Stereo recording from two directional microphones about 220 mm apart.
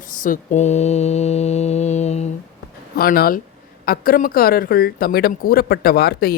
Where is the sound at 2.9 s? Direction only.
45° left (ahead or behind).